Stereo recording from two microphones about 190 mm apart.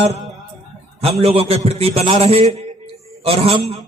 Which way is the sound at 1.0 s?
30° right (ahead or behind).